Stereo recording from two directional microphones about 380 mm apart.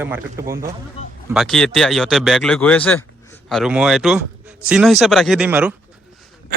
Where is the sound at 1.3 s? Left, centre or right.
Centre.